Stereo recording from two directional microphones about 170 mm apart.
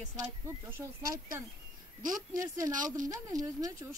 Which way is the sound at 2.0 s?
50° right (ahead or behind).